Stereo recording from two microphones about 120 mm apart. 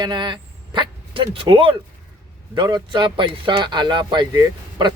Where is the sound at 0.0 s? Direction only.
40° right (ahead or behind).